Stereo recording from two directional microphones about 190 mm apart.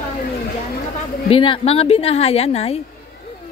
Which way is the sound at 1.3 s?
30° left (ahead or behind).